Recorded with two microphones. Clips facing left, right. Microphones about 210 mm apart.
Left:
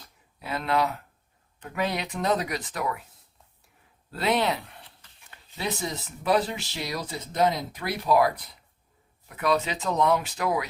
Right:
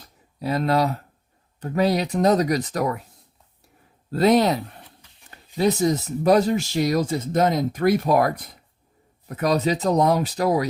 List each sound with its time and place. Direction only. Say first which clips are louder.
0.3 s speech: right 5 dB; 40° right (ahead or behind)
4.1 s speech: right 8 dB; 40° right (ahead or behind)